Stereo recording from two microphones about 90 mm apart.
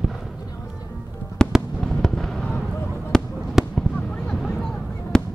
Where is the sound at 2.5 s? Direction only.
25° left (ahead or behind).